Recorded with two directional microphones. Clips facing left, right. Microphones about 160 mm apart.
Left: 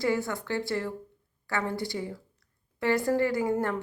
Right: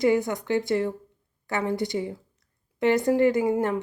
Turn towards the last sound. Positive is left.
turn(degrees=-15)  # may be behind; listen again after turning